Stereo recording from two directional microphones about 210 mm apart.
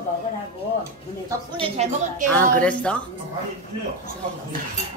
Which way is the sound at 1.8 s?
30° right (ahead or behind).